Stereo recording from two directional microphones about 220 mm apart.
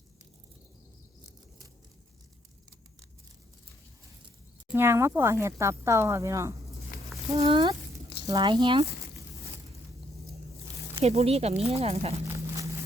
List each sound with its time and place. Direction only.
4.7 s speech: 10° right (ahead or behind)
7.3 s speech: 25° right (ahead or behind)
11.0 s speech: 30° right (ahead or behind)
12.2 s a sound: 15° right (ahead or behind)